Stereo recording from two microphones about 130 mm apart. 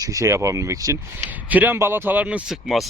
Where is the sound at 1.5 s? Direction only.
15° right (ahead or behind).